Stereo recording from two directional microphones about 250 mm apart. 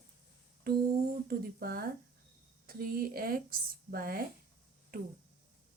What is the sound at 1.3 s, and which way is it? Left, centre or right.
Speech, right.